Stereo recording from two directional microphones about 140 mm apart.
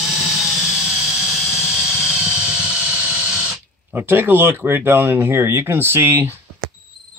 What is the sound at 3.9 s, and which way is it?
Speech, 15° right (ahead or behind).